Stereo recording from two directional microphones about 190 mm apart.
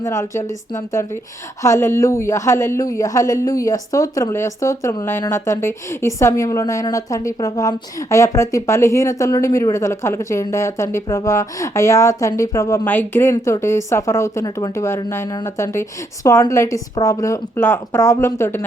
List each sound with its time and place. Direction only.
0.0 s speech: 15° left (ahead or behind)